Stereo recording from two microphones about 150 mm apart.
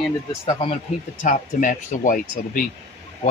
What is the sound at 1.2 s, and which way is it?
Speech, 60° left (ahead or behind).